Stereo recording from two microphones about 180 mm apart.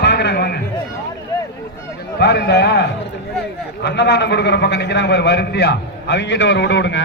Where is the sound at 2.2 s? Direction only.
65° left (ahead or behind).